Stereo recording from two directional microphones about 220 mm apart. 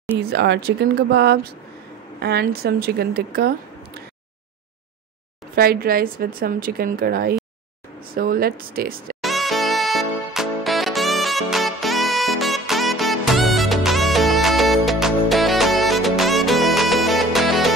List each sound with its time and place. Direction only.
0.2 s speech: 50° right (ahead or behind)
5.6 s speech: 45° right (ahead or behind)
9.2 s music: centre (ahead or behind)